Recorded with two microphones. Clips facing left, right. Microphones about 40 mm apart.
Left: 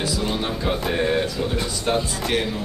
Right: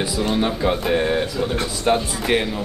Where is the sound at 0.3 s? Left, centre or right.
Centre.